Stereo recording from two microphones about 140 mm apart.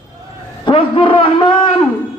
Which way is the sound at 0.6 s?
40° left (ahead or behind).